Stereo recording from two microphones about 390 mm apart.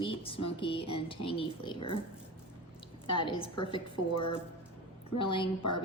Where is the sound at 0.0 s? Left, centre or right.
Centre.